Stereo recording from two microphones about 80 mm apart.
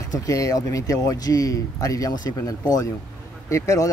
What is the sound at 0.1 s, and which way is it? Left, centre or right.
Speech, left.